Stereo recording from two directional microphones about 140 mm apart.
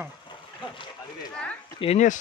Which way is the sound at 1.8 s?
55° left (ahead or behind).